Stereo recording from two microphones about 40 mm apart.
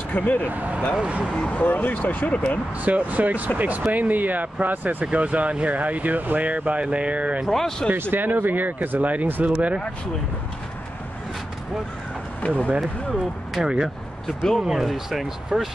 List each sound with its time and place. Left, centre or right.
0.1 s speech: left
0.5 s speech: right
0.9 s speech: right
1.5 s speech: left
2.2 s speech: left
2.8 s speech: right
7.4 s speech: centre
7.9 s speech: right
12.4 s speech: left
13.6 s speech: centre